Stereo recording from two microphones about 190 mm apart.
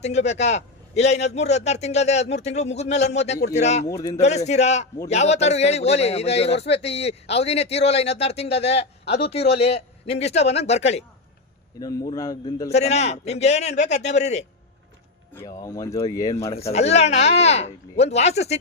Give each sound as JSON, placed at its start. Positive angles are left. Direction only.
{"t": 0.0, "sound": "a man's voice", "side_deg": 35}
{"t": 3.8, "sound": "speech", "side_deg": 15}
{"t": 4.2, "sound": "a man's voice", "side_deg": 35}
{"t": 11.8, "sound": "a man's voice", "side_deg": 20}
{"t": 12.7, "sound": "a man's voice", "side_deg": 35}
{"t": 15.4, "sound": "speech", "side_deg": 20}
{"t": 16.6, "sound": "a man's voice", "side_deg": 35}